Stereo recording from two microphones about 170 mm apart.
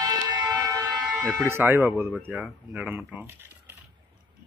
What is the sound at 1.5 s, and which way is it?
Speech, 15° right (ahead or behind).